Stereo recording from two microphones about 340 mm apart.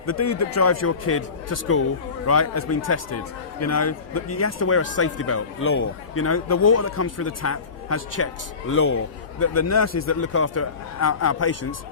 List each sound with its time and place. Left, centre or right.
0.0 s a man's voice: left